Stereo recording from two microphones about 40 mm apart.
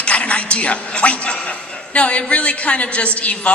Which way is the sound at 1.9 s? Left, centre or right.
Left.